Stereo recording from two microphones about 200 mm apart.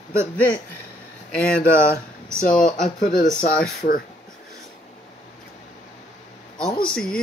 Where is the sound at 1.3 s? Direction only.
5° left (ahead or behind).